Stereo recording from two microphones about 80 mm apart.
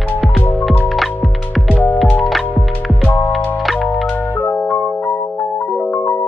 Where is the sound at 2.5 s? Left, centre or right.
Left.